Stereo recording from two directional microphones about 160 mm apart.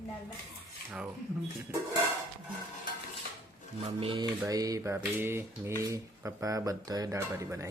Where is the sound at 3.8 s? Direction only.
35° right (ahead or behind).